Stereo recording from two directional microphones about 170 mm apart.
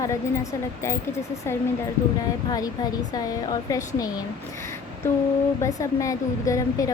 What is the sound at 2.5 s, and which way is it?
A woman's voice, 25° left (ahead or behind).